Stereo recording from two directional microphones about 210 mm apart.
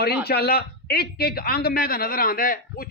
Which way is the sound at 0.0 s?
50° left (ahead or behind).